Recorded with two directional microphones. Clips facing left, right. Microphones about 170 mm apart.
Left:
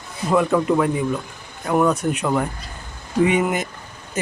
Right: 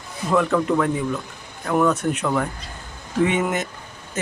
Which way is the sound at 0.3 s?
15° left (ahead or behind).